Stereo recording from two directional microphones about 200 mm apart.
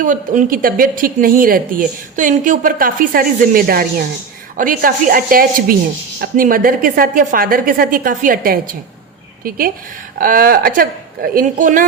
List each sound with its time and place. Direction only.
0.0 s speech: 40° right (ahead or behind)